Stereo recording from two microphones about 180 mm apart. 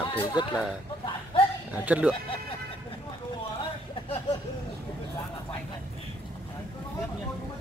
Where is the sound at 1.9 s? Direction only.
5° right (ahead or behind).